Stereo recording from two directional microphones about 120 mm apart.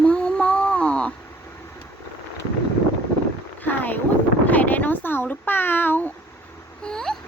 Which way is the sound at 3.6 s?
15° left (ahead or behind).